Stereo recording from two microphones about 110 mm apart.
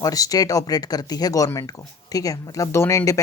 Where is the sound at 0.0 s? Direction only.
35° left (ahead or behind).